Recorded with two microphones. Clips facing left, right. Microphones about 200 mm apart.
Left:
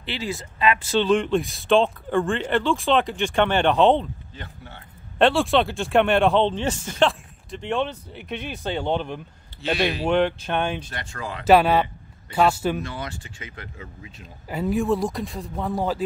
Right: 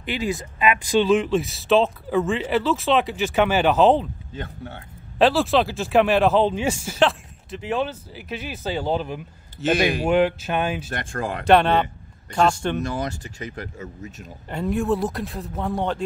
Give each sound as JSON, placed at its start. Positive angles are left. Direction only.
{"t": 0.0, "sound": "speech", "side_deg": -15}
{"t": 4.4, "sound": "speech", "side_deg": -50}
{"t": 5.2, "sound": "speech", "side_deg": 0}
{"t": 9.6, "sound": "speech", "side_deg": -45}
{"t": 10.0, "sound": "speech", "side_deg": -5}
{"t": 10.9, "sound": "speech", "side_deg": -50}
{"t": 11.4, "sound": "speech", "side_deg": 5}
{"t": 12.8, "sound": "speech", "side_deg": -40}
{"t": 14.5, "sound": "speech", "side_deg": 0}